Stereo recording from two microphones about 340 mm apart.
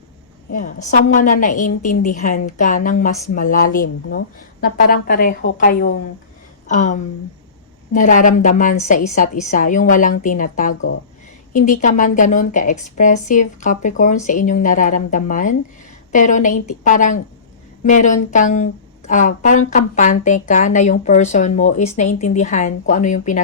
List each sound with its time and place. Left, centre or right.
0.5 s speech: left